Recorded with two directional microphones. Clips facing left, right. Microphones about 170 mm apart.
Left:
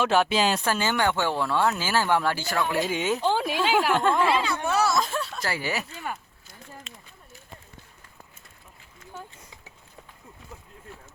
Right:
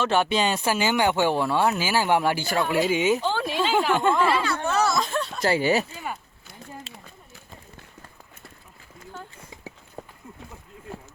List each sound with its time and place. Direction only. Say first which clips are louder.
0.0 s speech: even; 5° left (ahead or behind)
3.2 s speech: left 1 dB; 10° left (ahead or behind)
4.2 s speech: right 1 dB; 15° left (ahead or behind)
5.4 s speech: right 12 dB; 25° right (ahead or behind)
5.9 s speech: right 1 dB; 5° right (ahead or behind)
6.9 s a sound: right 3 dB; 30° right (ahead or behind)